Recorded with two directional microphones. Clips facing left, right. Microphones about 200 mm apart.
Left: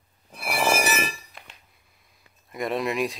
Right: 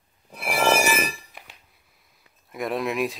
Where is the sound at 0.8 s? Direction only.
15° right (ahead or behind).